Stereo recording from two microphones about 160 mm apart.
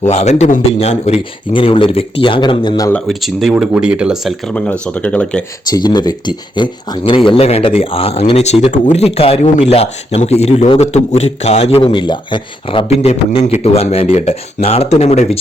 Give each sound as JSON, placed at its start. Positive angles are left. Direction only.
{"t": 0.0, "sound": "speech", "side_deg": 45}
{"t": 2.9, "sound": "speech", "side_deg": 0}
{"t": 5.7, "sound": "speech", "side_deg": 25}